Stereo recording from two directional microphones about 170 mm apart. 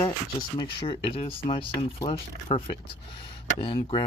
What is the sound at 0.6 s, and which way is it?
Speech, 30° left (ahead or behind).